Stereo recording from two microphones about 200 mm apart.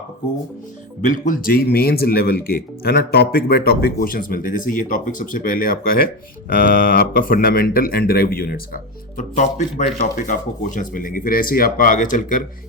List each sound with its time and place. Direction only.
1.0 s speech: 40° left (ahead or behind)